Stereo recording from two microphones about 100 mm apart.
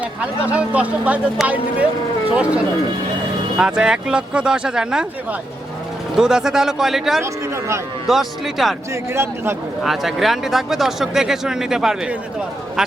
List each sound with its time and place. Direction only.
0.2 s speech: 15° right (ahead or behind)
3.6 s speech: 10° right (ahead or behind)
6.1 s speech: 5° right (ahead or behind)
7.2 s a man's voice: 25° right (ahead or behind)
8.0 s speech: centre (ahead or behind)
9.1 s a man's voice: 25° right (ahead or behind)
9.8 s speech: centre (ahead or behind)